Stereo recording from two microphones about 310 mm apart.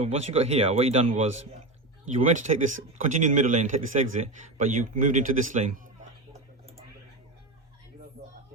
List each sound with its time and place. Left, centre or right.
0.0 s speech: centre
2.1 s speech: right